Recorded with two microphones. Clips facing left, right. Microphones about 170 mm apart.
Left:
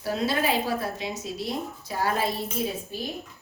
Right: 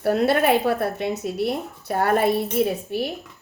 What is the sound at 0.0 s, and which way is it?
Speech, 60° right (ahead or behind).